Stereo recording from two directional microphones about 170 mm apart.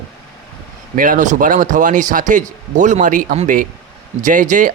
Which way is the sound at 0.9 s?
55° right (ahead or behind).